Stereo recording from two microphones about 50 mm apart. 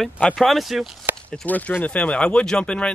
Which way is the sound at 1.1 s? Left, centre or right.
Right.